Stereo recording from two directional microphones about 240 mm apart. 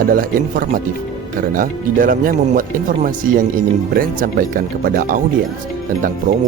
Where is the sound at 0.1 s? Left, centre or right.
Right.